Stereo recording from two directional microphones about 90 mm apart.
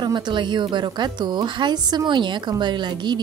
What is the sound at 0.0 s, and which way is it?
A woman's voice, 60° right (ahead or behind).